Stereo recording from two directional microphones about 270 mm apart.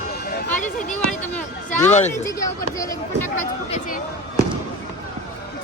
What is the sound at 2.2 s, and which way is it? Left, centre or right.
Speech, centre.